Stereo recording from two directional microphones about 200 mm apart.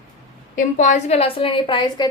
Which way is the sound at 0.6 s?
40° left (ahead or behind).